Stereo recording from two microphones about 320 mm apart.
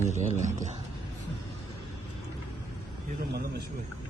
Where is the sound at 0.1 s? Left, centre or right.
Right.